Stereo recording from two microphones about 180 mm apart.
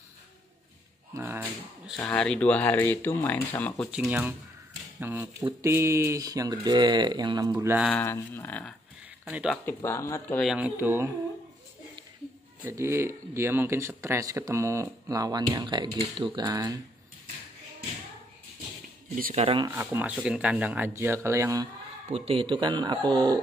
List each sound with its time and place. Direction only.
1.1 s speech: 15° right (ahead or behind)
2.0 s speech: 5° left (ahead or behind); by 7.5 s 20° right (ahead or behind)
7.5 s speech: 10° right (ahead or behind)
7.9 s speech: 15° left (ahead or behind)
9.2 s speech: 5° right (ahead or behind)
9.7 s speech: 15° left (ahead or behind)
10.4 s speech: 5° right (ahead or behind)
12.6 s speech: 15° right (ahead or behind)
19.3 s speech: 30° right (ahead or behind)
19.7 s speech: 10° right (ahead or behind)
22.1 s speech: 30° right (ahead or behind)